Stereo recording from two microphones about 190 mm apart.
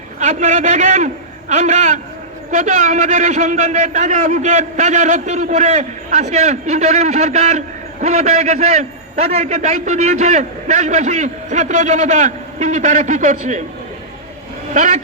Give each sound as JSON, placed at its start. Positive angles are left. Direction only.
{"t": 0.2, "sound": "a man's voice", "side_deg": -40}
{"t": 14.7, "sound": "speech", "side_deg": -40}